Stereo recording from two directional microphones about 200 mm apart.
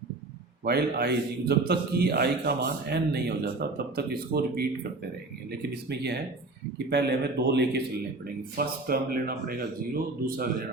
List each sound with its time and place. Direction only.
0.6 s a man's voice: 50° right (ahead or behind)